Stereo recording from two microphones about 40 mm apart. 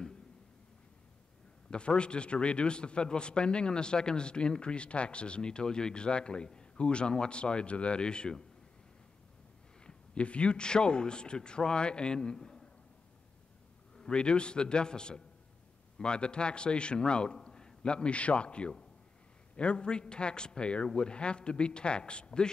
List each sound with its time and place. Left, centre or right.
1.7 s a man's voice: left
9.8 s a man's voice: left
13.9 s a man's voice: left